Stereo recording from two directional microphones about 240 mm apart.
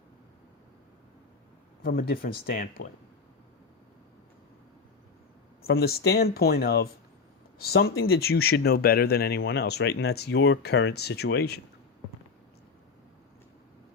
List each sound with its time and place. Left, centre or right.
1.8 s speech: left
5.7 s speech: left